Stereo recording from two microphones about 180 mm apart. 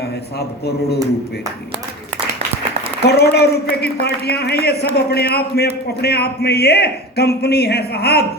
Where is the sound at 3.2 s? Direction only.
60° left (ahead or behind).